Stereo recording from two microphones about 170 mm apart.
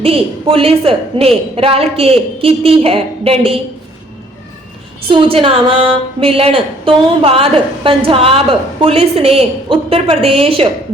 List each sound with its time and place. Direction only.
0.0 s a woman's voice: 35° right (ahead or behind)
5.0 s a woman's voice: 30° right (ahead or behind)